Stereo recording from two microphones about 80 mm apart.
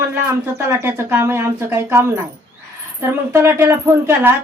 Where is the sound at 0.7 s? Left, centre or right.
Right.